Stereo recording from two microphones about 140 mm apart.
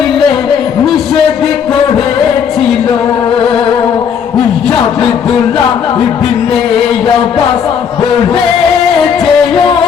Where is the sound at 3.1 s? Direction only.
35° left (ahead or behind).